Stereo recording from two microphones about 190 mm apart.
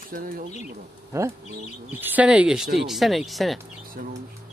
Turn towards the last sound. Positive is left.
turn(degrees=0)  # may be behind; listen again after turning